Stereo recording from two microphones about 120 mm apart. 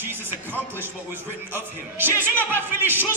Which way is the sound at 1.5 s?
15° right (ahead or behind).